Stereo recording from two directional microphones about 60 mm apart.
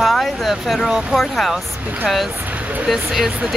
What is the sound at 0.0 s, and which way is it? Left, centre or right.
Speech, centre.